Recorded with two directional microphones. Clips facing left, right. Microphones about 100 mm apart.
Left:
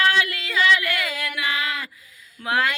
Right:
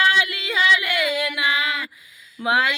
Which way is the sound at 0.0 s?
20° right (ahead or behind).